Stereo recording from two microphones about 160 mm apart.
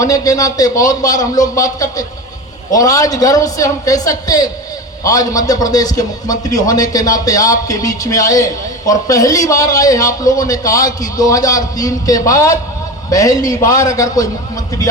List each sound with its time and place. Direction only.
0.0 s a man's voice: 20° left (ahead or behind)